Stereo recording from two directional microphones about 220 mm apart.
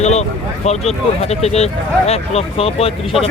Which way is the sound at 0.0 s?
30° left (ahead or behind).